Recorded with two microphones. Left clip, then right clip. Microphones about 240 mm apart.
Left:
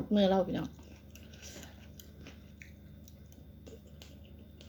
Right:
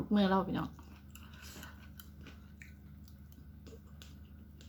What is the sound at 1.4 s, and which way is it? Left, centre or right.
Biting, centre.